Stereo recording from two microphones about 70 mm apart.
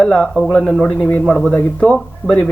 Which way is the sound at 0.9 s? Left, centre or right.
Left.